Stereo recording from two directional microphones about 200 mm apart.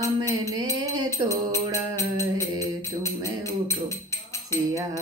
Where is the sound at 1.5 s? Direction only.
15° left (ahead or behind).